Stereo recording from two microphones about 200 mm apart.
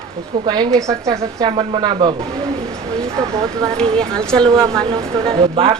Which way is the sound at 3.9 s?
5° left (ahead or behind).